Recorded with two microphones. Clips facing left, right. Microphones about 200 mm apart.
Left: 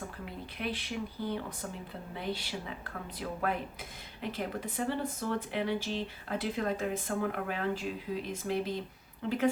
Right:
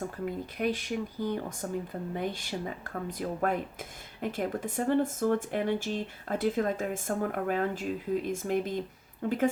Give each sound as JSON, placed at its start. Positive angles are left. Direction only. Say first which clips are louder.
{"t": 0.3, "sound": "speech", "louder": "right 7 dB", "side_deg": -45}